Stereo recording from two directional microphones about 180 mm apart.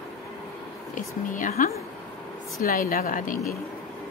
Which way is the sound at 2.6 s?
55° left (ahead or behind).